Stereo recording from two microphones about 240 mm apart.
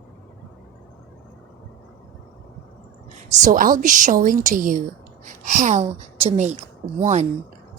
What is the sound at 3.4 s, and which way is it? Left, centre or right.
A woman's voice, right.